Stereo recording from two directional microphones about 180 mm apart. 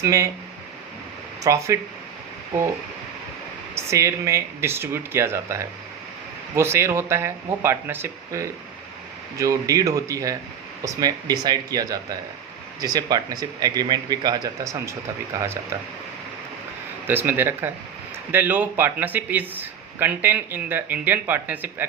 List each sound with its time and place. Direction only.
0.0 s speech: 15° right (ahead or behind)
1.5 s speech: 15° right (ahead or behind)
3.8 s speech: 15° right (ahead or behind)
17.1 s speech: 10° right (ahead or behind)